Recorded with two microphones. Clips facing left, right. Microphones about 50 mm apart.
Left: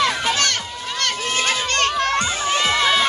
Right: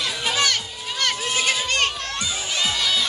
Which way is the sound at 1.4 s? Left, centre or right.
Left.